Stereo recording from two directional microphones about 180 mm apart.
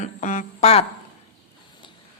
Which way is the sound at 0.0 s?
45° left (ahead or behind).